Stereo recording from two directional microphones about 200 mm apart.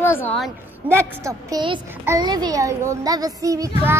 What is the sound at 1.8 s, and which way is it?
A child's voice, 10° right (ahead or behind).